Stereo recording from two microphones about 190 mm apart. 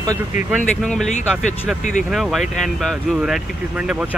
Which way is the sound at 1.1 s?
40° left (ahead or behind).